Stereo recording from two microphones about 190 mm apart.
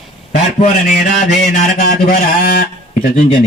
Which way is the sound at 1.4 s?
45° left (ahead or behind).